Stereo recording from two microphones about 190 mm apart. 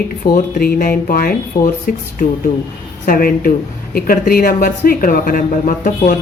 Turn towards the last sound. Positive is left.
turn(degrees=45)  # may be behind; listen again after turning